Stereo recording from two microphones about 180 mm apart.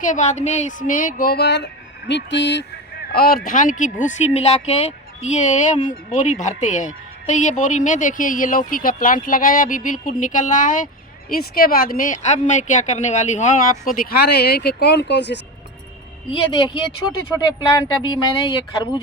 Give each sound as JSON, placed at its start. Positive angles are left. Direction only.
{"t": 0.0, "sound": "speech", "side_deg": 45}
{"t": 3.1, "sound": "speech", "side_deg": 55}
{"t": 16.3, "sound": "speech", "side_deg": 25}